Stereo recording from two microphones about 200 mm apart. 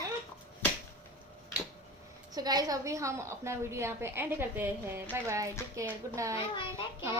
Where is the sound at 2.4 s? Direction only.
20° right (ahead or behind).